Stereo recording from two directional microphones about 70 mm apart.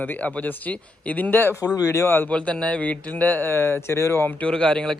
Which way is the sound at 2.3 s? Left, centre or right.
Centre.